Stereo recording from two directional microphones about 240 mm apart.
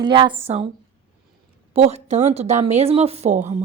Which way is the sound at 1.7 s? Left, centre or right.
Right.